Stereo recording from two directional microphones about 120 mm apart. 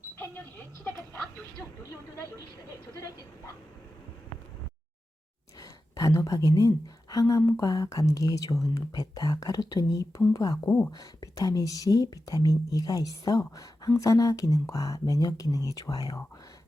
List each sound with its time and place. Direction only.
5.5 s a woman's voice: 30° left (ahead or behind)